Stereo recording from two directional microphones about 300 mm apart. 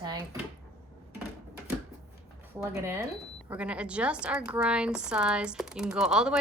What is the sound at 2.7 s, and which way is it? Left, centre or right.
A woman's voice, centre.